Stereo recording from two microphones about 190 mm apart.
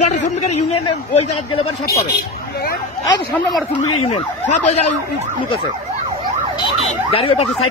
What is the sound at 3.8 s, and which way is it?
A man's voice, 30° left (ahead or behind).